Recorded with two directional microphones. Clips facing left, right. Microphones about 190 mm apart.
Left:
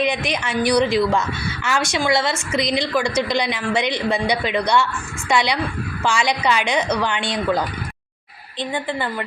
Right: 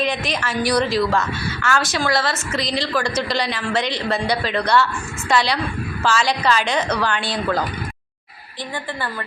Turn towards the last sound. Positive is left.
turn(degrees=20)  # may be behind; listen again after turning